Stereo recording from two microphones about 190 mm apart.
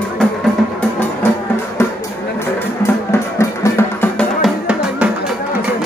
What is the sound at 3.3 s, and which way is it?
Music, 10° left (ahead or behind).